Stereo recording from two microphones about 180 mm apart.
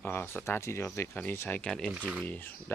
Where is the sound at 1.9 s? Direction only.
5° right (ahead or behind).